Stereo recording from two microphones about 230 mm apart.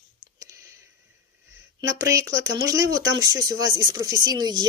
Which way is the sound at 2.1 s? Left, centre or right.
Centre.